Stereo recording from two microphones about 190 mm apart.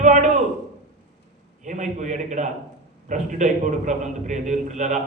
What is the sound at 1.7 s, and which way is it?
A man's voice, 40° right (ahead or behind).